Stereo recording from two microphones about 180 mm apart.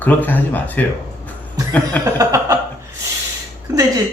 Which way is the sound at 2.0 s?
15° right (ahead or behind).